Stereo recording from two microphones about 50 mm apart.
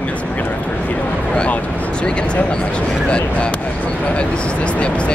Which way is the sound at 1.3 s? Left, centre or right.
Left.